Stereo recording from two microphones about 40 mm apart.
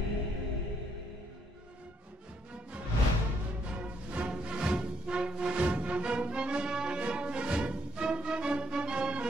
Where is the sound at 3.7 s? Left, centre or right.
Right.